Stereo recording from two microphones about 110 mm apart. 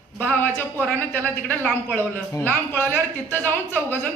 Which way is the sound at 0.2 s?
15° left (ahead or behind).